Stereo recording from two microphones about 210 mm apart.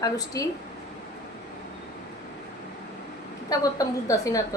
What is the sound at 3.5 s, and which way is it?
Speech, 15° left (ahead or behind).